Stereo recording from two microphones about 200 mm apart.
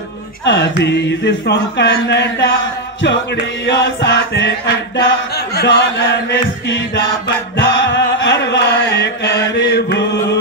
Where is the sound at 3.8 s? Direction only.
60° left (ahead or behind).